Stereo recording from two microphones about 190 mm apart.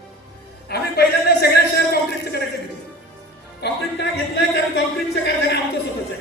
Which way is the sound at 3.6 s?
65° left (ahead or behind).